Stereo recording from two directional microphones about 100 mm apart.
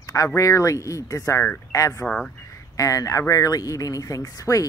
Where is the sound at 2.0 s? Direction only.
5° left (ahead or behind).